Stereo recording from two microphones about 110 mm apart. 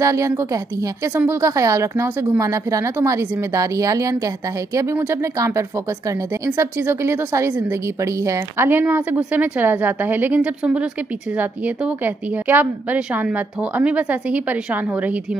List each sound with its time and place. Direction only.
0.0 s a woman's voice: 30° right (ahead or behind)